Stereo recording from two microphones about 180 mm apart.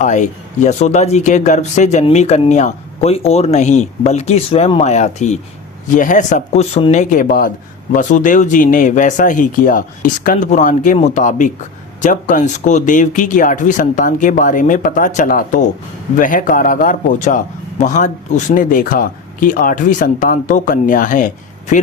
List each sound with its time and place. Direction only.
0.0 s a man's voice: 40° left (ahead or behind)